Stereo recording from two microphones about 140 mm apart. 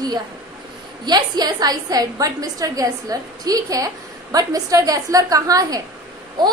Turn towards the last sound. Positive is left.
turn(degrees=-30)  # may be behind; listen again after turning